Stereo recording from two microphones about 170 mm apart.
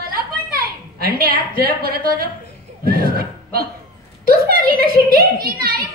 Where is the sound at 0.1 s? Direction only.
60° right (ahead or behind).